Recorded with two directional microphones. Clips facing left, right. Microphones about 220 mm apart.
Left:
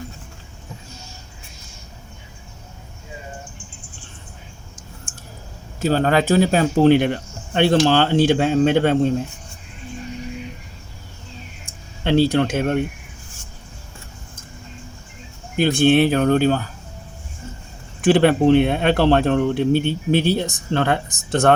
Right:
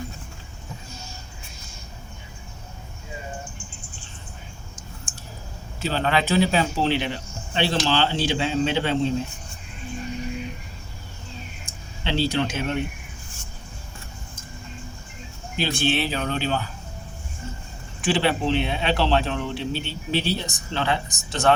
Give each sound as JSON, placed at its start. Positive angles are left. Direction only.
{"t": 5.8, "sound": "speech", "side_deg": 45}
{"t": 12.0, "sound": "speech", "side_deg": 50}
{"t": 15.5, "sound": "speech", "side_deg": 50}
{"t": 18.0, "sound": "speech", "side_deg": 55}